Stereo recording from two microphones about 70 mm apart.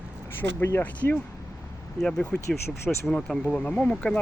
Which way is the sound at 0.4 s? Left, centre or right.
Left.